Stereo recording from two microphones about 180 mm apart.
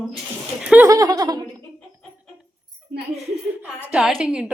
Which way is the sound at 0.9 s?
20° right (ahead or behind).